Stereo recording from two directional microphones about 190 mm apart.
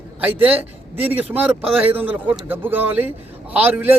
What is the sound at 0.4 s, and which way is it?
Speech, 10° right (ahead or behind).